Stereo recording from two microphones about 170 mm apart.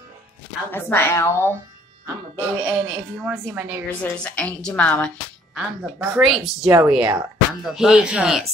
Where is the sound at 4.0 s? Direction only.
10° left (ahead or behind).